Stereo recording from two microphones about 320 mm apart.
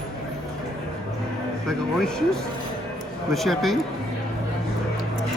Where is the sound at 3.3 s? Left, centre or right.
Centre.